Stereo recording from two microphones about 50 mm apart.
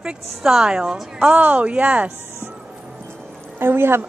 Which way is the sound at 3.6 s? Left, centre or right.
Right.